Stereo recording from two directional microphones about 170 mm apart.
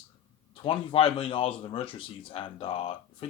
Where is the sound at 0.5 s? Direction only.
30° left (ahead or behind).